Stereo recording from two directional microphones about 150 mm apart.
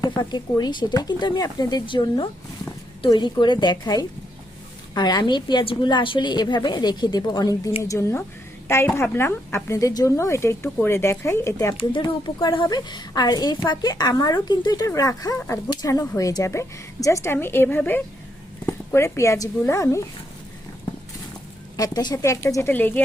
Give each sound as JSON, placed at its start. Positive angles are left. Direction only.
{"t": 0.2, "sound": "a woman's voice", "side_deg": 30}
{"t": 11.8, "sound": "a woman's voice", "side_deg": 35}
{"t": 21.8, "sound": "a woman's voice", "side_deg": 25}